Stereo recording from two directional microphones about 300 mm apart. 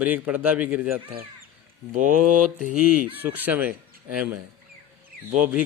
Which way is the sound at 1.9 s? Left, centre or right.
Right.